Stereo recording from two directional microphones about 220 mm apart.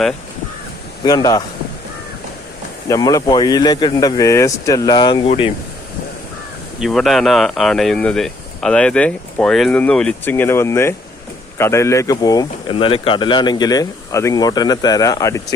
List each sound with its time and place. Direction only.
1.0 s speech: 15° left (ahead or behind)
2.9 s speech: 15° left (ahead or behind)
6.7 s speech: centre (ahead or behind); by 15.5 s 15° left (ahead or behind)